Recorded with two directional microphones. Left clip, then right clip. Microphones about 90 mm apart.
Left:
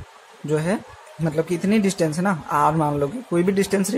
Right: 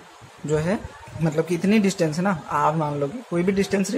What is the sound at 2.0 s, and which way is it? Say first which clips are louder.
A woman's voice: left 1 dB; 20° left (ahead or behind).